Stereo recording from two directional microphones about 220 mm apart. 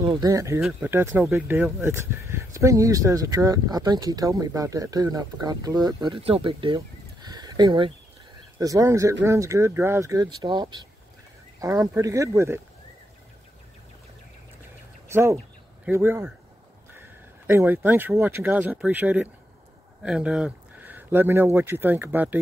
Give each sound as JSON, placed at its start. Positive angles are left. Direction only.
{"t": 0.0, "sound": "speech", "side_deg": -15}
{"t": 0.6, "sound": "speech", "side_deg": -5}
{"t": 15.0, "sound": "speech", "side_deg": -10}